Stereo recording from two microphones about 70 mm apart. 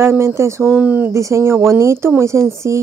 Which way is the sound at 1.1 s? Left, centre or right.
Right.